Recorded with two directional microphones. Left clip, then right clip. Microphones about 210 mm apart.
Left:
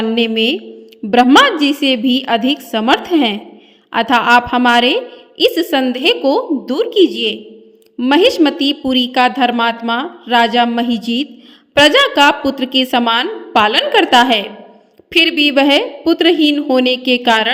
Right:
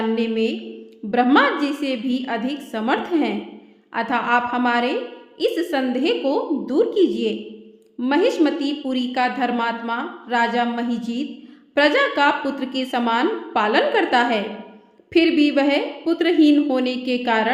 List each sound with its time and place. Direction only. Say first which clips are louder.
0.2 s a woman's voice: left 8 dB; 40° left (ahead or behind)